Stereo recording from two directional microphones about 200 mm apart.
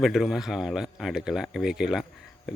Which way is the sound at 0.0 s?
Centre (ahead or behind).